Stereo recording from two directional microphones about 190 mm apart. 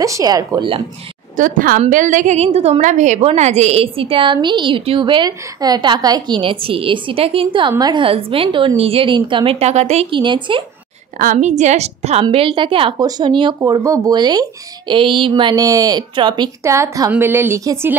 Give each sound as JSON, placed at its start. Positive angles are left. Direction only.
{"t": 0.0, "sound": "a woman's voice", "side_deg": -20}
{"t": 1.3, "sound": "a woman's voice", "side_deg": -45}
{"t": 11.1, "sound": "a woman's voice", "side_deg": -40}